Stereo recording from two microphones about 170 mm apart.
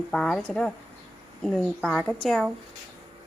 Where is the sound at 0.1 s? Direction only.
Centre (ahead or behind).